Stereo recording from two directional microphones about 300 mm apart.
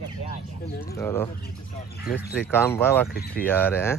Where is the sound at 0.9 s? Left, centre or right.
Centre.